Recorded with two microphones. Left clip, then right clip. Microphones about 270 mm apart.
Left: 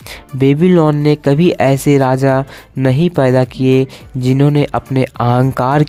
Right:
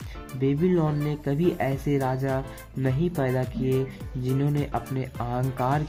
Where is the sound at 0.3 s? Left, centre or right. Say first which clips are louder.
Left 13 dB; left.